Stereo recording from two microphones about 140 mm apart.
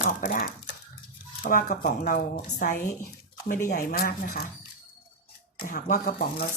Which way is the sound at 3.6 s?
90° left.